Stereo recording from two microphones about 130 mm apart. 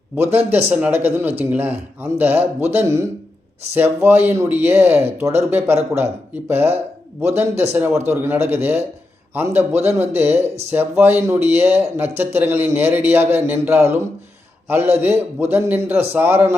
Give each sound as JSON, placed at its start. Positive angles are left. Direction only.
{"t": 0.2, "sound": "a man's voice", "side_deg": -15}